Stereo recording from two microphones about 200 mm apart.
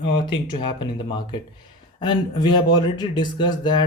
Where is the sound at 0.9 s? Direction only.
25° left (ahead or behind).